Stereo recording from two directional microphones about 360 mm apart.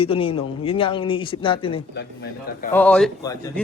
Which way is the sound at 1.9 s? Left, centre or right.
Left.